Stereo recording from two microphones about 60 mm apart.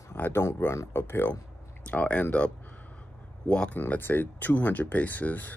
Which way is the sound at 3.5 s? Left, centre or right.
Centre.